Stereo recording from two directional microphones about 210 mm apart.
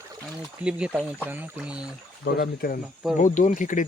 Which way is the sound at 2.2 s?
50° left (ahead or behind).